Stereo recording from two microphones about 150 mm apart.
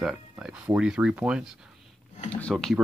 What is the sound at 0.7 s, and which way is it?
Speech, 5° right (ahead or behind).